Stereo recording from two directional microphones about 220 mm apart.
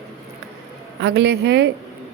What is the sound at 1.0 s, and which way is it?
Speech, 50° right (ahead or behind).